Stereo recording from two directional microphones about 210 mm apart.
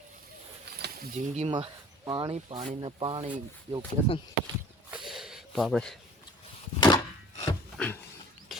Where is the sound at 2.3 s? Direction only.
30° right (ahead or behind).